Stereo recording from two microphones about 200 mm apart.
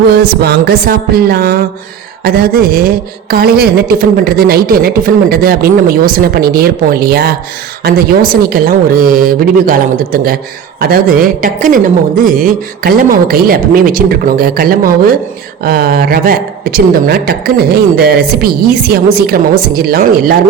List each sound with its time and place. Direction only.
0.1 s a woman's voice: 50° right (ahead or behind)